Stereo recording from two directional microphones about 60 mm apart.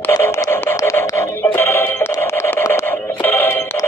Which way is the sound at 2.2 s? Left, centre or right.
Left.